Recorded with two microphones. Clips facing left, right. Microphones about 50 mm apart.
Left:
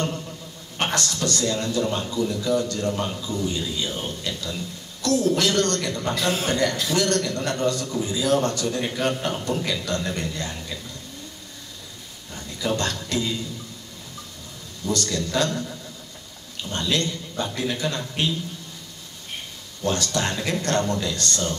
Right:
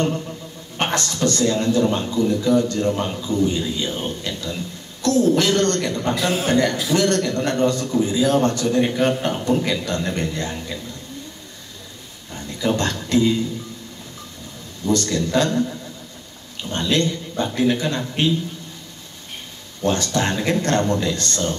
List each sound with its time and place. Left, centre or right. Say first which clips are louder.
0.7 s a man's voice: right 3 dB; right
5.0 s a sound: right 4 dB; right
5.4 s a man's voice: right 3 dB; right
6.1 s a man's voice: right 3 dB; centre
7.0 s a man's voice: right 3 dB; right
12.5 s a man's voice: right 4 dB; right
14.9 s a man's voice: right 5 dB; right
16.7 s a man's voice: right 5 dB; right
19.8 s a man's voice: right 4 dB; right